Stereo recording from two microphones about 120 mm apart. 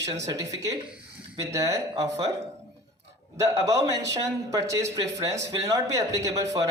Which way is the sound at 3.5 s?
30° right (ahead or behind).